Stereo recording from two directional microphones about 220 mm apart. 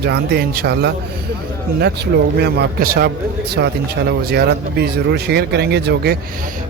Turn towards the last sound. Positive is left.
turn(degrees=-45)  # may be behind; listen again after turning